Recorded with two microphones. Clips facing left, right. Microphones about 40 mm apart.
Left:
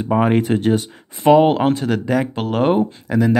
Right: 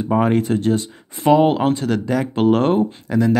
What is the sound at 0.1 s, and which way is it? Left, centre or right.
Speech, centre.